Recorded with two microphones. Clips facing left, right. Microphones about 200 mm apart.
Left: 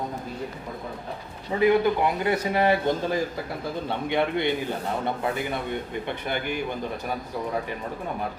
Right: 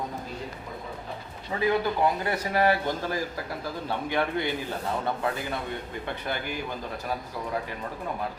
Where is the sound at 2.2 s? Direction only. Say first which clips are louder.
Left 2 dB; 20° left (ahead or behind).